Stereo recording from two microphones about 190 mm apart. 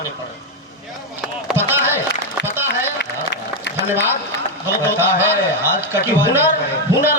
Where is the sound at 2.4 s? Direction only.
65° left (ahead or behind).